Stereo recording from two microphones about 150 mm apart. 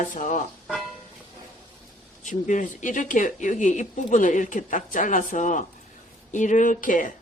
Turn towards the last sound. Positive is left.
turn(degrees=60)  # may be behind; listen again after turning